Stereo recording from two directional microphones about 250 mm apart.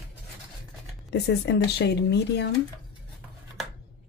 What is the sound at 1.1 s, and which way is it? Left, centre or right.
A woman's voice, left.